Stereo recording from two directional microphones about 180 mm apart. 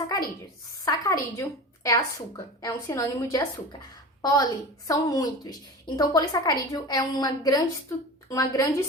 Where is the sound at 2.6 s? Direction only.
20° left (ahead or behind).